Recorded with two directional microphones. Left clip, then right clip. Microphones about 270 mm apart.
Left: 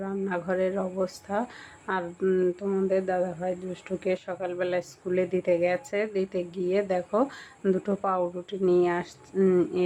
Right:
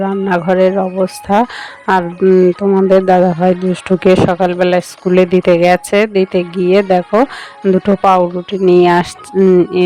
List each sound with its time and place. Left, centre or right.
0.0 s speech: right